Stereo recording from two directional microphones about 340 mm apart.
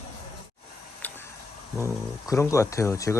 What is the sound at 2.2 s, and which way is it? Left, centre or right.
Speech, centre.